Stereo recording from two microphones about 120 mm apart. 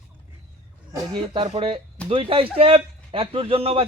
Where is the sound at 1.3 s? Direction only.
45° right (ahead or behind).